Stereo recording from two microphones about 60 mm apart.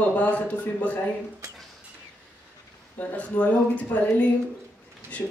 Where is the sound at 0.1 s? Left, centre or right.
Left.